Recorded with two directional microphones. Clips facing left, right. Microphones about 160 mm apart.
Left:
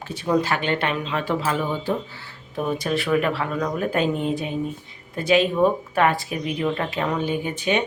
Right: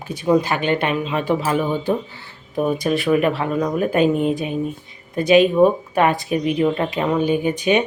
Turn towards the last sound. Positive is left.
turn(degrees=-15)  # may be behind; listen again after turning